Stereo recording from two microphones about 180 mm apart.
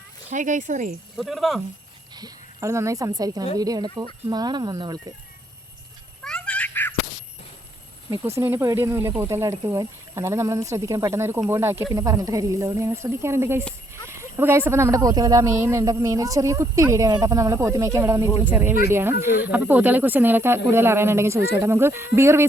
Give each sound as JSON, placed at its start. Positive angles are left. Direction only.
{"t": 0.3, "sound": "speech", "side_deg": -45}
{"t": 1.1, "sound": "speech", "side_deg": 0}
{"t": 2.1, "sound": "speech", "side_deg": -20}
{"t": 6.2, "sound": "a sound", "side_deg": 5}
{"t": 8.1, "sound": "speech", "side_deg": -15}